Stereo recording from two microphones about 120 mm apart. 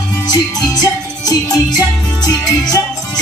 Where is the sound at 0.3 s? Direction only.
35° left (ahead or behind).